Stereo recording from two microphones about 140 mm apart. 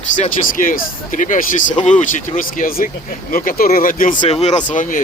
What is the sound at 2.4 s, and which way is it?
Speech, 80° left.